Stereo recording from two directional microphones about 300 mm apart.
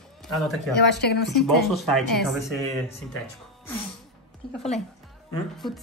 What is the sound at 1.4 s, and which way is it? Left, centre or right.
Speech, centre.